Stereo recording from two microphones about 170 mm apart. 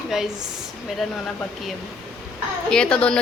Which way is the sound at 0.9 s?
Centre (ahead or behind).